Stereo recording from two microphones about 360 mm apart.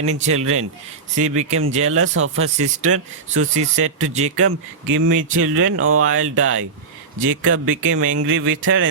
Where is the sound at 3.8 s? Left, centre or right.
Right.